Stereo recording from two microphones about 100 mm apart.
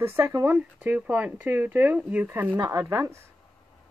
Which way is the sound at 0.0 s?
25° right (ahead or behind).